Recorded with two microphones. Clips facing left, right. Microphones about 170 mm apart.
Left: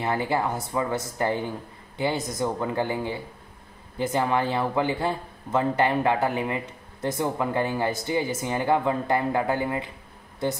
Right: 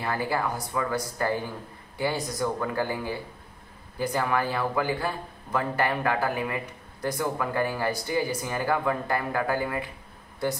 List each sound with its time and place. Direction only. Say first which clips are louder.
0.0 s speech: left 3 dB; 20° left (ahead or behind)